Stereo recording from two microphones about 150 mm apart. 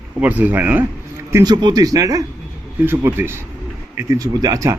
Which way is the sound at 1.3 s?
25° right (ahead or behind).